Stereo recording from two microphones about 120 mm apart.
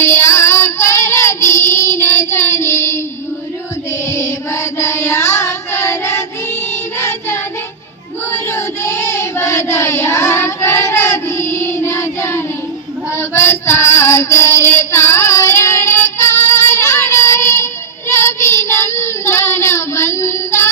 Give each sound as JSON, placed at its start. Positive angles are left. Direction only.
{"t": 0.0, "sound": "child singing", "side_deg": 20}
{"t": 4.0, "sound": "music", "side_deg": 20}
{"t": 8.3, "sound": "child singing", "side_deg": 20}
{"t": 13.1, "sound": "female singing", "side_deg": 20}